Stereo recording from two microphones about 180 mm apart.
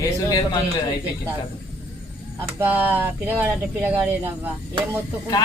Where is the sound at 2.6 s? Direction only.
10° right (ahead or behind).